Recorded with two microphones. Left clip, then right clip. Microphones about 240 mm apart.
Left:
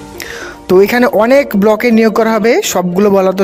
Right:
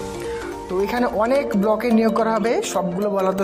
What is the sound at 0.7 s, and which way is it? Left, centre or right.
Speech, left.